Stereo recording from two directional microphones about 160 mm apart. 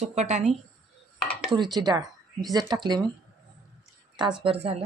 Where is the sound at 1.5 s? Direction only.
30° right (ahead or behind).